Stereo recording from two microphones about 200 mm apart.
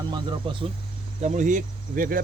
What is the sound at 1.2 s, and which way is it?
Speech, 40° right (ahead or behind).